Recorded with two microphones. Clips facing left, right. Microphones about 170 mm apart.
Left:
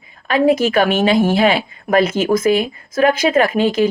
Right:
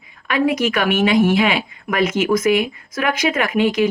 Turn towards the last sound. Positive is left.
turn(degrees=30)  # may be behind; listen again after turning